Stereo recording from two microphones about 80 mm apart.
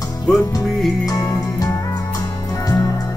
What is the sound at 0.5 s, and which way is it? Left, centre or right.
Music, left.